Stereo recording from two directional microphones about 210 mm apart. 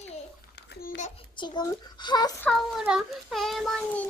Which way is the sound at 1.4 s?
20° left (ahead or behind).